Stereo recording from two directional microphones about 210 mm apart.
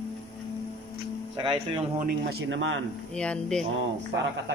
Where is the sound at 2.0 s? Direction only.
55° right (ahead or behind).